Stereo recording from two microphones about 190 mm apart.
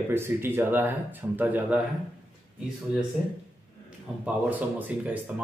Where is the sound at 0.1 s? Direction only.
10° right (ahead or behind).